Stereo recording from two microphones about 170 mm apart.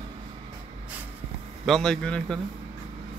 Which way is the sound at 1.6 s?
Centre (ahead or behind).